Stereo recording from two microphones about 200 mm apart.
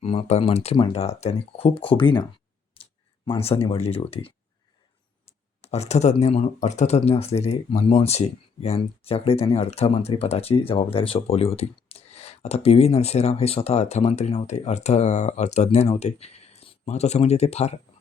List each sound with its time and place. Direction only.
0.0 s speech: 30° left (ahead or behind)
3.2 s speech: 30° left (ahead or behind)